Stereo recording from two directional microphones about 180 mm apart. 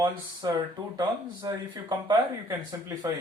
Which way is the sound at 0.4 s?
25° right (ahead or behind).